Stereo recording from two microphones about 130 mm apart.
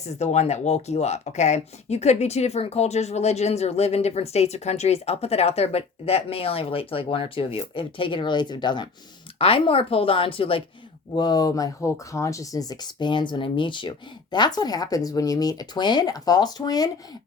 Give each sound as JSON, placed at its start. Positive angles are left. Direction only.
{"t": 0.2, "sound": "speech", "side_deg": 60}
{"t": 11.1, "sound": "speech", "side_deg": 30}